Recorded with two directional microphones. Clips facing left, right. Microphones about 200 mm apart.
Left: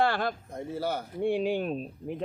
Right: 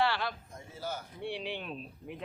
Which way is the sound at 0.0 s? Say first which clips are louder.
Left 4 dB; 50° left (ahead or behind).